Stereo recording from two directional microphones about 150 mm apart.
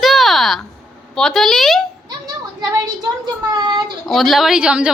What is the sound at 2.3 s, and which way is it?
Speech, 25° right (ahead or behind).